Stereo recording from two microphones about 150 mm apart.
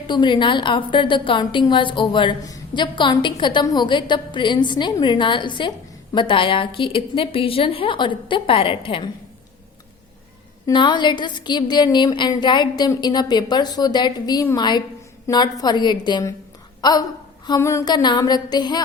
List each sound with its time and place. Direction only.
0.1 s a woman's voice: 30° left (ahead or behind)
10.7 s a woman's voice: 30° left (ahead or behind)